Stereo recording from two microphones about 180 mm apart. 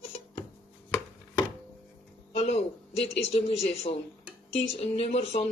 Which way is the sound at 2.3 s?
35° left (ahead or behind).